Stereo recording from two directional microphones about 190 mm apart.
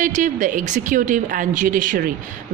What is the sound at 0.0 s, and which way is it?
A woman's voice, 40° right (ahead or behind).